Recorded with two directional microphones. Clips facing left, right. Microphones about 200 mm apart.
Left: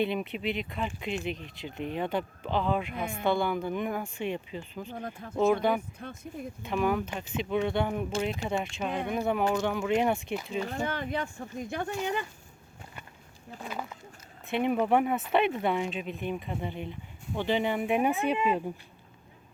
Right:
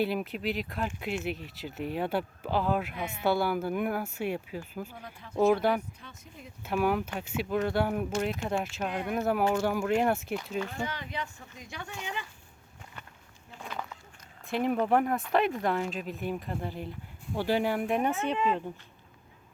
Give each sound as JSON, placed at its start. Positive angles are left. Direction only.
{"t": 0.0, "sound": "speech", "side_deg": -5}
{"t": 4.9, "sound": "speech", "side_deg": 50}
{"t": 5.4, "sound": "speech", "side_deg": -5}
{"t": 6.0, "sound": "speech", "side_deg": 50}
{"t": 6.6, "sound": "speech", "side_deg": -5}
{"t": 10.6, "sound": "speech", "side_deg": 40}
{"t": 13.6, "sound": "a sound", "side_deg": 5}
{"t": 14.4, "sound": "speech", "side_deg": 0}